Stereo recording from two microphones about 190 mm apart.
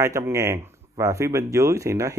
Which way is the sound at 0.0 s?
15° right (ahead or behind).